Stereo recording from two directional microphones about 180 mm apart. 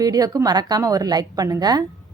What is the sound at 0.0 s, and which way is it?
A woman's voice, 20° right (ahead or behind).